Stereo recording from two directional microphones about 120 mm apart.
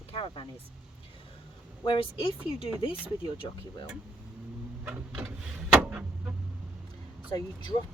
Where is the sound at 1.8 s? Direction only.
45° left (ahead or behind).